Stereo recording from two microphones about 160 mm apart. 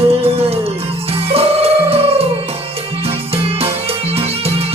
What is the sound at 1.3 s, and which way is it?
Music, 40° right (ahead or behind).